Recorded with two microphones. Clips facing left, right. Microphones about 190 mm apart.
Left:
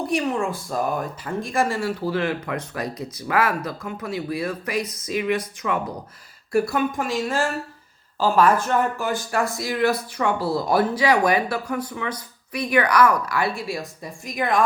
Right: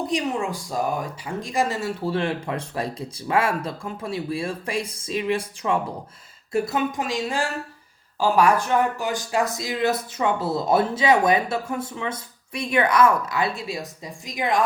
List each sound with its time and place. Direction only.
0.1 s speech: 15° right (ahead or behind)